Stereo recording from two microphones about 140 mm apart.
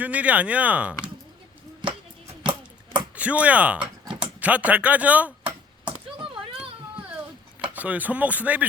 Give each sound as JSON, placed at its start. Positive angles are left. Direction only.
{"t": 0.0, "sound": "speech", "side_deg": -10}
{"t": 1.8, "sound": "music", "side_deg": -35}
{"t": 2.4, "sound": "a sound", "side_deg": -35}
{"t": 3.2, "sound": "speech", "side_deg": -10}
{"t": 5.4, "sound": "chop", "side_deg": -35}
{"t": 7.7, "sound": "speech", "side_deg": -10}